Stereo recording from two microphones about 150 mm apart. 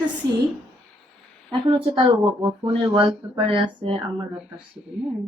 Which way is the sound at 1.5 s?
35° right (ahead or behind).